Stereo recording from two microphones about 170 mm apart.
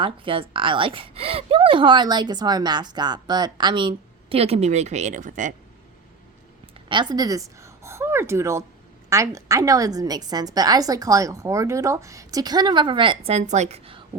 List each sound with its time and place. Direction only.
0.0 s a woman's voice: 30° right (ahead or behind); by 5.5 s 50° right (ahead or behind)
6.8 s a woman's voice: 25° right (ahead or behind)